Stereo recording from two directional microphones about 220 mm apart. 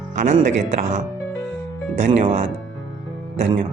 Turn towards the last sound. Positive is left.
turn(degrees=-30)  # may be behind; listen again after turning